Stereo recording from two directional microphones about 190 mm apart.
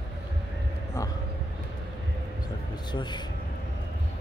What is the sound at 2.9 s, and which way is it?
Speech, 25° left (ahead or behind).